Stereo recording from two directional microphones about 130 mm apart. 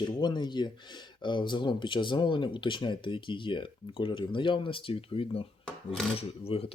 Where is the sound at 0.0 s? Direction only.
35° left (ahead or behind).